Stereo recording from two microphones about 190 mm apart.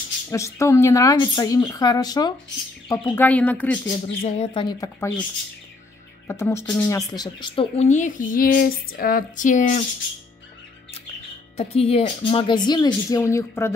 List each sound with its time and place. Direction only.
0.3 s speech: 15° left (ahead or behind)
2.9 s speech: 10° left (ahead or behind)
4.2 s speech: 35° left (ahead or behind)
4.6 s speech: 20° left (ahead or behind)
6.2 s speech: 15° left (ahead or behind); by 9.8 s 40° left (ahead or behind)
11.5 s speech: 30° left (ahead or behind); by 13.7 s 15° left (ahead or behind)